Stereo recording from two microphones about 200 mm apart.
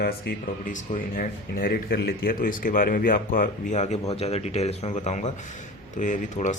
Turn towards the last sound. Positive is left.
turn(degrees=40)  # may be behind; listen again after turning